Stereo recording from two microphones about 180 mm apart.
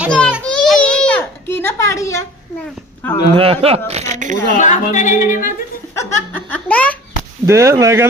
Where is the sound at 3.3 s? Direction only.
30° right (ahead or behind).